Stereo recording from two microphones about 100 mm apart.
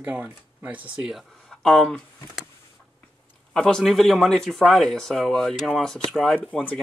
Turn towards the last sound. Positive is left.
turn(degrees=10)  # may be behind; listen again after turning